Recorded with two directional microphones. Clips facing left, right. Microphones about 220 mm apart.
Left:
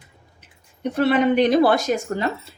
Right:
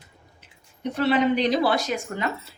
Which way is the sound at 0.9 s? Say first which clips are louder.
Left 4 dB; 55° left (ahead or behind).